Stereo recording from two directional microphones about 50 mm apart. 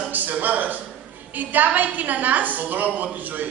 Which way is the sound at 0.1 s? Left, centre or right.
Right.